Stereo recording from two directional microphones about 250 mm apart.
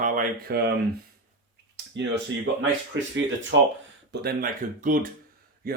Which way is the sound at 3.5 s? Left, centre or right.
Right.